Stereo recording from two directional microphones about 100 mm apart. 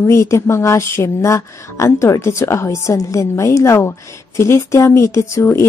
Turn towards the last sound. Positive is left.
turn(degrees=30)  # may be behind; listen again after turning